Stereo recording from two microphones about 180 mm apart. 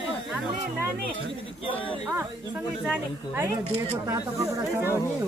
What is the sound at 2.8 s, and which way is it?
Speech, 10° right (ahead or behind).